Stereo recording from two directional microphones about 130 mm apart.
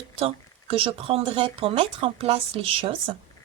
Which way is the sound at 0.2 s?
45° right (ahead or behind).